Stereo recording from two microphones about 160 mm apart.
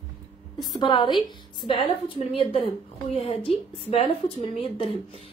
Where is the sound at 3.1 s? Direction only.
35° left (ahead or behind).